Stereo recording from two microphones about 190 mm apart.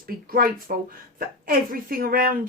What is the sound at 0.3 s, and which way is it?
Speech, 50° right (ahead or behind).